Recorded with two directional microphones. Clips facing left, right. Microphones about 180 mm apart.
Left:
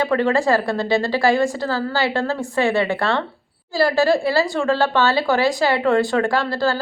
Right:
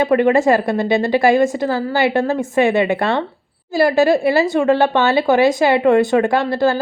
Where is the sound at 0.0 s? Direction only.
20° right (ahead or behind).